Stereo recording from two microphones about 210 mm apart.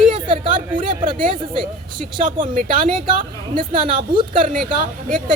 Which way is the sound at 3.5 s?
25° right (ahead or behind).